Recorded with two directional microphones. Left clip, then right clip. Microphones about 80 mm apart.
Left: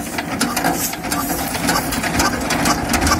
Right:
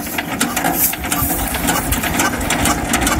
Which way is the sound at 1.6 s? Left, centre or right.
Centre.